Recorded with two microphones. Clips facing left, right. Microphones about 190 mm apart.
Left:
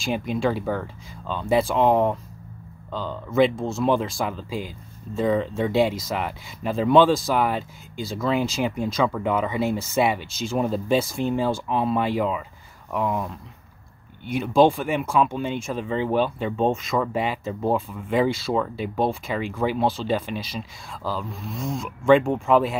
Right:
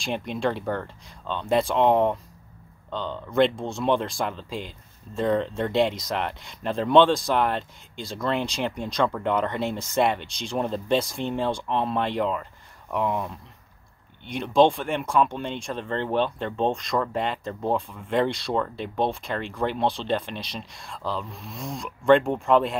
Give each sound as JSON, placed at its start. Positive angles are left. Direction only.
{"t": 0.0, "sound": "speech", "side_deg": 0}